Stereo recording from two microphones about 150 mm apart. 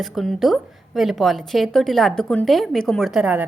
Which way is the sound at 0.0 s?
Centre (ahead or behind).